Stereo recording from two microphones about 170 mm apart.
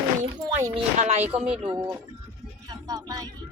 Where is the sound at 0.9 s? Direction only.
40° right (ahead or behind).